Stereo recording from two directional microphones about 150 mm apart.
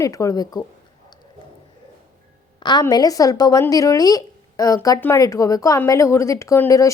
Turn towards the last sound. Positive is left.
turn(degrees=20)  # may be behind; listen again after turning